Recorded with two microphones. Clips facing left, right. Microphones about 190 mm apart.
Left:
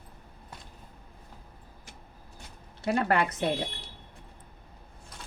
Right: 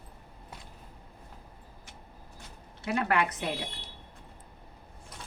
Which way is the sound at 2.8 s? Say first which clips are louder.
Left 2 dB; 35° left (ahead or behind).